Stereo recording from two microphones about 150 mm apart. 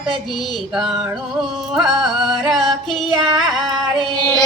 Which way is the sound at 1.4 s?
Centre (ahead or behind).